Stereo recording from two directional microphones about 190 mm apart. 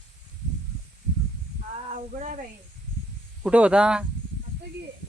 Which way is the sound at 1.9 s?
45° right (ahead or behind).